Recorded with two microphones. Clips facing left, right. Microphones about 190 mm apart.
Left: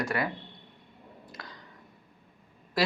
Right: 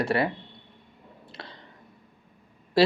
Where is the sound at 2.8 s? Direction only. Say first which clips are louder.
Right 8 dB; 30° right (ahead or behind).